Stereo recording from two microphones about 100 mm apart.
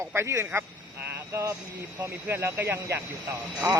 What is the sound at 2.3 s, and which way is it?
Speech, 20° right (ahead or behind).